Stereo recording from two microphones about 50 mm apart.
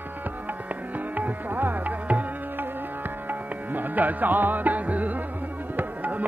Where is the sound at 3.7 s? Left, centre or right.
Right.